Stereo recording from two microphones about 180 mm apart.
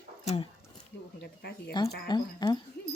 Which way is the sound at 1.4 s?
65° left (ahead or behind).